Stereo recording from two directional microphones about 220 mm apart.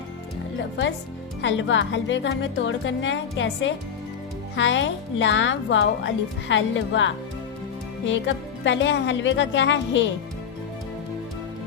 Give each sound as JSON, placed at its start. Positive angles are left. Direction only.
{"t": 1.4, "sound": "speech", "side_deg": 55}
{"t": 8.6, "sound": "speech", "side_deg": 55}